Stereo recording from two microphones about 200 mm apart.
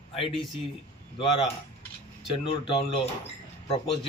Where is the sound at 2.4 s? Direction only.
30° left (ahead or behind).